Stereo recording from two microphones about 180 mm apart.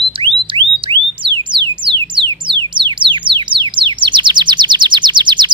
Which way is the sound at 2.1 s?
25° right (ahead or behind).